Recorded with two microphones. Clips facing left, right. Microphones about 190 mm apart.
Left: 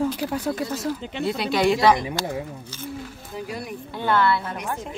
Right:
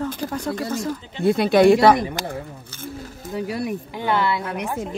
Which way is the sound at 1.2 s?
55° right (ahead or behind).